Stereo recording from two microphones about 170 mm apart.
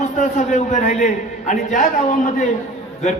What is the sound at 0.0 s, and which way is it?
A man's voice, 45° left (ahead or behind).